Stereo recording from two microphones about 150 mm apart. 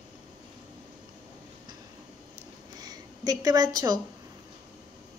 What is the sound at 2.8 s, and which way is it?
Speech, 25° right (ahead or behind).